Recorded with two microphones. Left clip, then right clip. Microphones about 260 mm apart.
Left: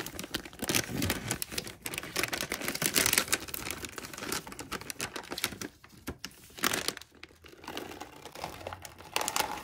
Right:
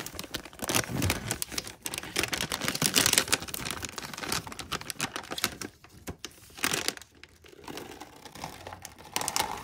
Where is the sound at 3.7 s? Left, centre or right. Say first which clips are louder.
Right 3 dB; centre.